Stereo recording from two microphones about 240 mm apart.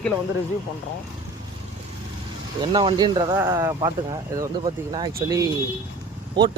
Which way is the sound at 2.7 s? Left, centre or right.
Centre.